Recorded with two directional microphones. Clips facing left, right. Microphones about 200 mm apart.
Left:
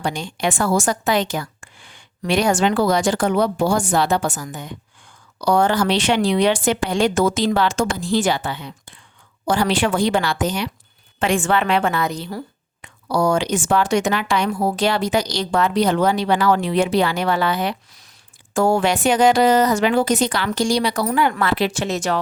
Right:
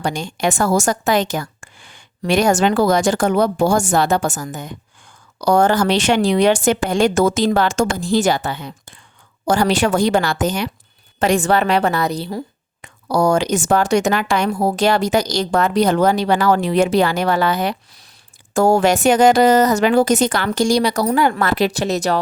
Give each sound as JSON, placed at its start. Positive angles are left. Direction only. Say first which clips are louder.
{"t": 0.0, "sound": "a woman's voice", "louder": "right 2 dB", "side_deg": -45}